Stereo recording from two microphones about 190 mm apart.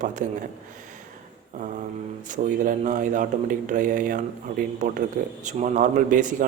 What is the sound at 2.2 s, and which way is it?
A man's voice, 40° right (ahead or behind).